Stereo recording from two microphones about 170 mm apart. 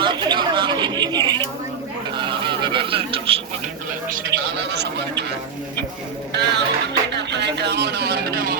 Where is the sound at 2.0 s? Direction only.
30° right (ahead or behind).